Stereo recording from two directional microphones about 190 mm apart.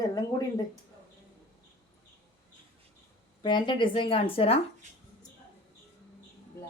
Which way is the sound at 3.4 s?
25° left (ahead or behind).